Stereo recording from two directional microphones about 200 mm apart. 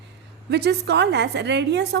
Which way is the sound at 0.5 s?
55° right (ahead or behind).